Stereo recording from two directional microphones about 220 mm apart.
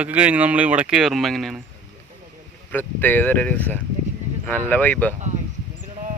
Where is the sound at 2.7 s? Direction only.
10° left (ahead or behind).